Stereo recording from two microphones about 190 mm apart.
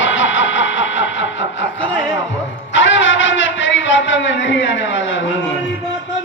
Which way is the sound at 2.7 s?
75° left (ahead or behind).